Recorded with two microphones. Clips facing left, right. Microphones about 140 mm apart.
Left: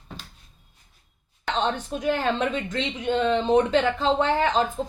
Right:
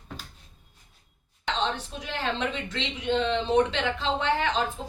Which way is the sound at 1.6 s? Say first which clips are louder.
Left 6 dB; 50° left (ahead or behind).